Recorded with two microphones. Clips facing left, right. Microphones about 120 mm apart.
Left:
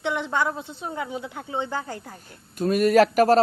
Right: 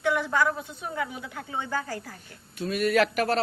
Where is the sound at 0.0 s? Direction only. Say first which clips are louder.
Even; 25° left (ahead or behind).